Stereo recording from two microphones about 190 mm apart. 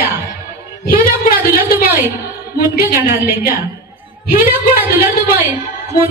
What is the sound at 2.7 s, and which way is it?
Speech, 50° left (ahead or behind).